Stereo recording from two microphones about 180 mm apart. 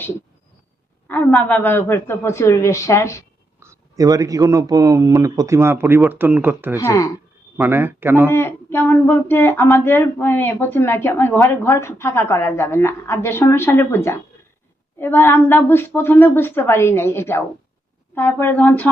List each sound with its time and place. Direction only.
1.0 s speech: 10° left (ahead or behind)
3.6 s speech: 15° right (ahead or behind)
6.7 s speech: 20° left (ahead or behind)
7.5 s speech: 10° right (ahead or behind)
8.3 s speech: 15° left (ahead or behind)